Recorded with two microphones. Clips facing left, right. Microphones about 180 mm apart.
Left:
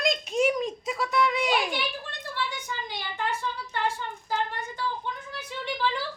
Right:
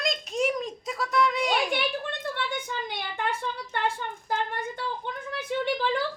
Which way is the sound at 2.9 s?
55° right (ahead or behind).